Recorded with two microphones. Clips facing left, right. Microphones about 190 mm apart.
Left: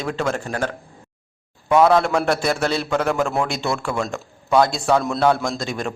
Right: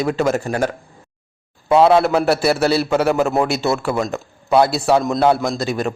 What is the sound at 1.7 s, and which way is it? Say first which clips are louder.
Speech: right 2 dB; 25° right (ahead or behind).